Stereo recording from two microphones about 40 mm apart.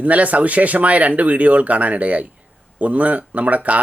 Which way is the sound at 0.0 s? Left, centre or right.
Right.